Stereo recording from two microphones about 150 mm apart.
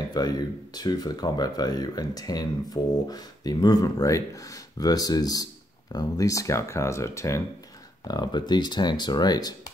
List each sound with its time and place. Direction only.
0.1 s speech: 25° left (ahead or behind)